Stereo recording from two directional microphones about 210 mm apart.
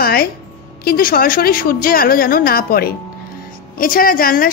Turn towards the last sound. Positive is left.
turn(degrees=40)  # may be behind; listen again after turning